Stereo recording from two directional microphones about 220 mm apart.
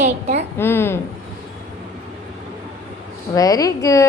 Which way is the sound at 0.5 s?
10° left (ahead or behind).